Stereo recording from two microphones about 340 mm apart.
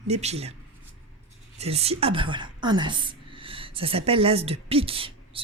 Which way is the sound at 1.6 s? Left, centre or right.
Centre.